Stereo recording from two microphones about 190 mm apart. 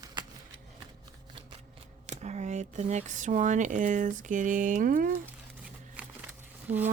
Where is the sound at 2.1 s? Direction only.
35° right (ahead or behind).